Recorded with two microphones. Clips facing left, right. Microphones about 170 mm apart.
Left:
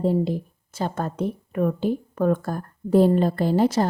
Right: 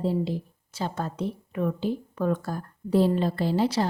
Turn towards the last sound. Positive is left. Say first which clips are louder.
# left 4 dB
turn(degrees=50)  # may be behind; listen again after turning